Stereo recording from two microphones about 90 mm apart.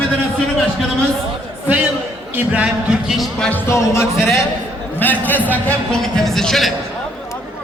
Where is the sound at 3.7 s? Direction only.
30° left (ahead or behind).